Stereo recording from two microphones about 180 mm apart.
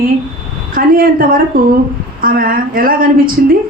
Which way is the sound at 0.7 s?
50° right (ahead or behind).